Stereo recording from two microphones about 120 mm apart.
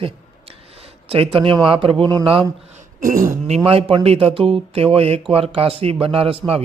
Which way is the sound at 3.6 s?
55° right (ahead or behind).